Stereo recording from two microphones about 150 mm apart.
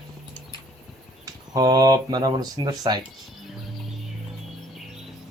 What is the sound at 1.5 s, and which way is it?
Speech, 25° right (ahead or behind).